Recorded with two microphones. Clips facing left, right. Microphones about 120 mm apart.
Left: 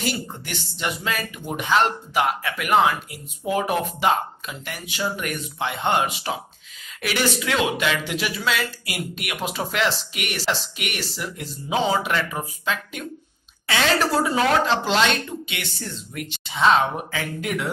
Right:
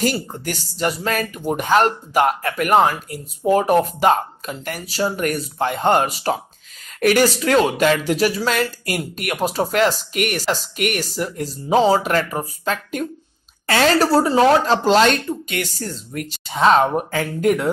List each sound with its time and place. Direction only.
0.0 s speech: 40° right (ahead or behind)